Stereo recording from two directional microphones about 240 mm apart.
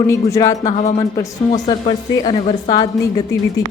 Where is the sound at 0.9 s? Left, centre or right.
Centre.